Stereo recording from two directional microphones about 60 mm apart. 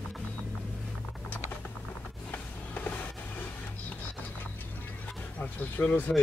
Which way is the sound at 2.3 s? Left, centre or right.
Left.